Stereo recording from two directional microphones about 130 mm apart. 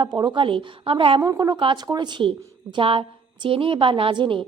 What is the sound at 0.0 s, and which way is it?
A woman's voice, 35° right (ahead or behind).